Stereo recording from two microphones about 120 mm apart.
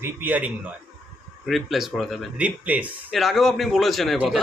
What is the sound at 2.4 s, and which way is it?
Speech, 10° right (ahead or behind).